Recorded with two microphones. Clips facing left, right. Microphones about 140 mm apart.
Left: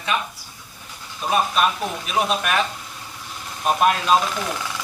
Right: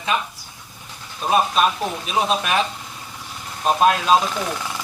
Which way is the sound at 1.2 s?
35° right (ahead or behind).